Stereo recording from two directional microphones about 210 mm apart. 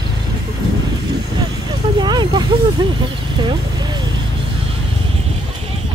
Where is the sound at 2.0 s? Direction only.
20° right (ahead or behind).